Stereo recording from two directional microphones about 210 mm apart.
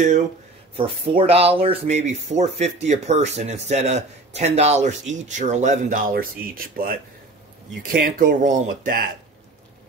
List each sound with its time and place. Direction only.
0.7 s speech: 25° right (ahead or behind)